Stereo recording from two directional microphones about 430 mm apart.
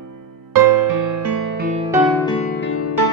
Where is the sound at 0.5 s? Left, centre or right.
Right.